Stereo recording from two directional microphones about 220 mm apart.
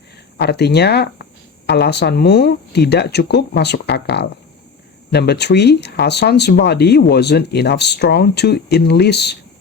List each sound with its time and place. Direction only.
0.3 s speech: 50° left (ahead or behind)